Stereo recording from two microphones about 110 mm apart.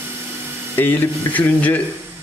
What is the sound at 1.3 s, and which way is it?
Speech, 15° left (ahead or behind).